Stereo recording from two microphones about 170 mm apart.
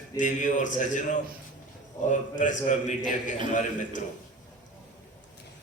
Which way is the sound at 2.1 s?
50° left (ahead or behind).